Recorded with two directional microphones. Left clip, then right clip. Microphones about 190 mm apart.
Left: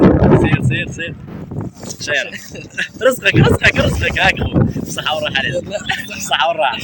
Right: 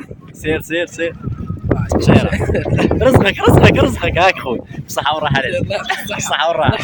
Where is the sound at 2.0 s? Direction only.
10° right (ahead or behind); by 5.8 s 30° right (ahead or behind).